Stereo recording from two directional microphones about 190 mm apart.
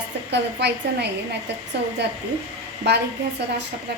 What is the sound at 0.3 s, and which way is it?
Speech, 65° right (ahead or behind).